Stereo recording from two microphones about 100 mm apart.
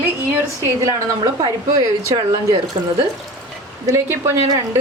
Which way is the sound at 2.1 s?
50° right (ahead or behind).